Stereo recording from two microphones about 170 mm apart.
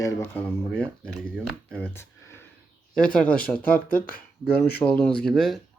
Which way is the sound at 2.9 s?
5° left (ahead or behind).